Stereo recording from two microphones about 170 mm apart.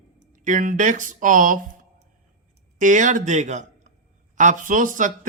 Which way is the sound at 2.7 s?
50° right (ahead or behind).